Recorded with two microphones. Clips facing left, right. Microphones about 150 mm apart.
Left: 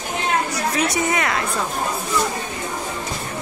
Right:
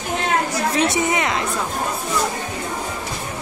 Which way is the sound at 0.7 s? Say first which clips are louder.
Right 1 dB; 25° right (ahead or behind).